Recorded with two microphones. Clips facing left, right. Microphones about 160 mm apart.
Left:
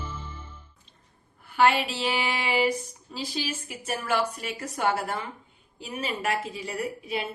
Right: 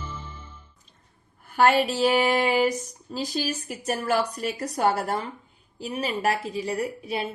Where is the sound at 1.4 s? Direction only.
45° right (ahead or behind).